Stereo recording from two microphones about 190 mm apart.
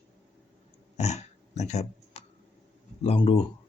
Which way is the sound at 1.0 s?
35° left (ahead or behind).